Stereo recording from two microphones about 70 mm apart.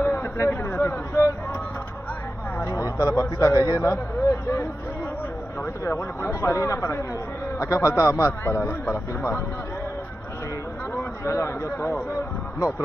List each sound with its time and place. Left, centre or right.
0.0 s a sound: left
2.6 s a man's voice: left
5.9 s a man's voice: left
11.0 s a man's voice: left